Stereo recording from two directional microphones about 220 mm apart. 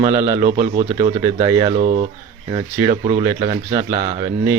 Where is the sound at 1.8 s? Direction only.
30° right (ahead or behind).